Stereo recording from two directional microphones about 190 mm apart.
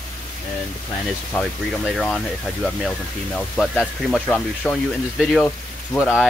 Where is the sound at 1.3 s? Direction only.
Centre (ahead or behind).